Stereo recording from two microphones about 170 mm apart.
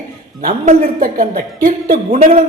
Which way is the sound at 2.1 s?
40° right (ahead or behind).